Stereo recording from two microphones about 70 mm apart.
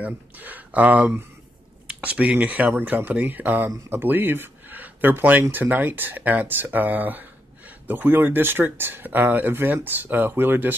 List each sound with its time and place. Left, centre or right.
0.0 s speech: right